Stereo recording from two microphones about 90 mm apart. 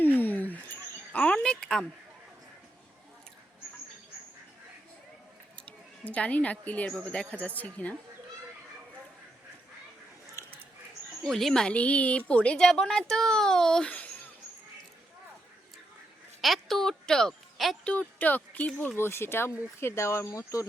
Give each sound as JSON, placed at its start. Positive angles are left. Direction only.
{"t": 0.2, "sound": "a sound", "side_deg": 20}
{"t": 5.6, "sound": "a woman's voice", "side_deg": 15}
{"t": 10.4, "sound": "a sound", "side_deg": 30}
{"t": 11.2, "sound": "a woman's voice", "side_deg": 5}
{"t": 16.4, "sound": "speech", "side_deg": 0}
{"t": 17.8, "sound": "speech", "side_deg": 15}